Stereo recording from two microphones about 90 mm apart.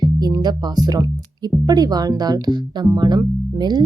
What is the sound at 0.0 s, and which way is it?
Speech, 45° right (ahead or behind).